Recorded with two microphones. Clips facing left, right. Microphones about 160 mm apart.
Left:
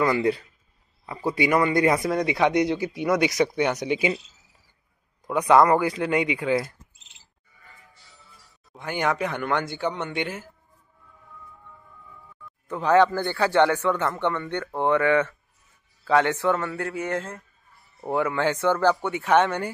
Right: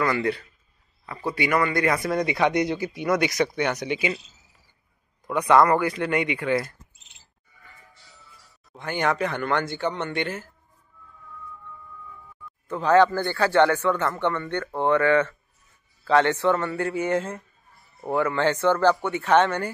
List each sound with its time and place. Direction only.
0.0 s speech: 15° left (ahead or behind)
2.0 s speech: 5° left (ahead or behind)
5.4 s a man's voice: 5° left (ahead or behind)
8.3 s speech: 10° left (ahead or behind)
12.6 s a man's voice: 10° left (ahead or behind)
18.1 s speech: 10° left (ahead or behind)